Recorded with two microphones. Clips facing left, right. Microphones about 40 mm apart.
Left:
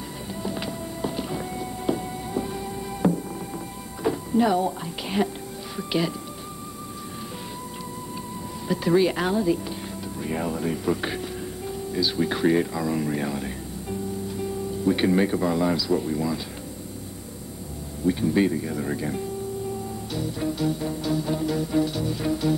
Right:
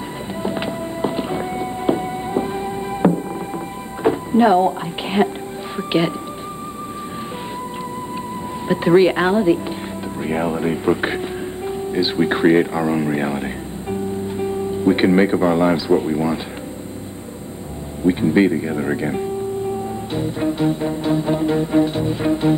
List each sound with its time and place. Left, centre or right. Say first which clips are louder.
0.4 s music: right 7 dB; right
4.0 s speech: right 7 dB; right
5.8 s music: right 7 dB; right
8.6 s music: right 7 dB; right
10.2 s speech: right 7 dB; right
18.0 s music: right 7 dB; right